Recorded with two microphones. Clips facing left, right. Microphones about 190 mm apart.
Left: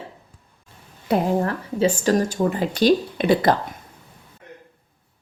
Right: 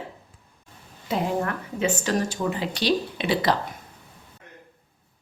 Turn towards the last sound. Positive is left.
turn(degrees=50)  # may be behind; listen again after turning